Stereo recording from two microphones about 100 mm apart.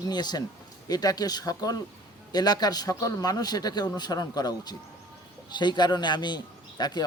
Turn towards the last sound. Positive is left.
turn(degrees=45)  # may be behind; listen again after turning